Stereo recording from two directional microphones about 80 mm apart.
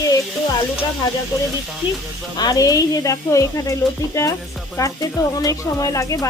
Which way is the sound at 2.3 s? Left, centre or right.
Left.